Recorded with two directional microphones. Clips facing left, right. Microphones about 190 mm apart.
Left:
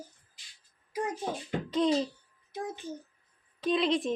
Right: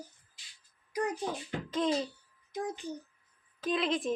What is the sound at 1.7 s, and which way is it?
Speech, centre (ahead or behind).